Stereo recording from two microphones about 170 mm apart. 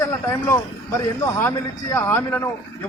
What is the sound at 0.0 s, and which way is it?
A man's voice, 15° left (ahead or behind).